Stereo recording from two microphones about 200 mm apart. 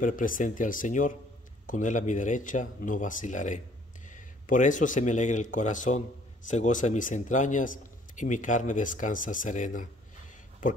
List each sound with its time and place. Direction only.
0.0 s speech: 40° left (ahead or behind)